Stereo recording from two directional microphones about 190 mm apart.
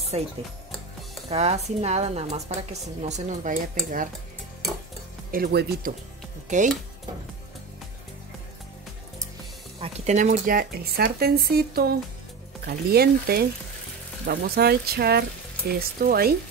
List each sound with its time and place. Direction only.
0.1 s a woman's voice: 30° right (ahead or behind)
1.3 s a woman's voice: 35° right (ahead or behind)
5.3 s speech: 55° right (ahead or behind)
6.5 s a woman's voice: 40° right (ahead or behind)
9.8 s speech: 35° right (ahead or behind); by 16.3 s 50° right (ahead or behind)